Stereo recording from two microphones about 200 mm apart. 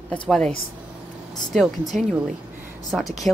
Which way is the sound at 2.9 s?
5° right (ahead or behind).